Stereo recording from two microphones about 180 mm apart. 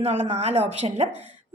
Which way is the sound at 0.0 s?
35° right (ahead or behind).